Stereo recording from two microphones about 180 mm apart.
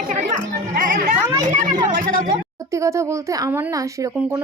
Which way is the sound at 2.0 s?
50° right (ahead or behind).